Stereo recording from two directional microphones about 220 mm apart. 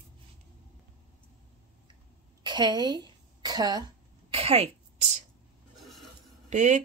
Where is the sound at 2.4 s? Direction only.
20° right (ahead or behind).